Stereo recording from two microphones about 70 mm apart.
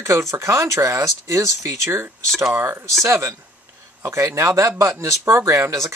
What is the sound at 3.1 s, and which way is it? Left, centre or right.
Speech, right.